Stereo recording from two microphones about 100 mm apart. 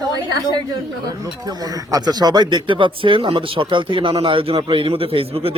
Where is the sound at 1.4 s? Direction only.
40° right (ahead or behind).